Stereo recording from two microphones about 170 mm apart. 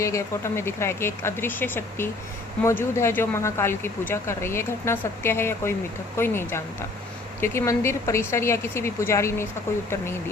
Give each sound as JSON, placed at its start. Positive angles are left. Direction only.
{"t": 0.0, "sound": "speech", "side_deg": 15}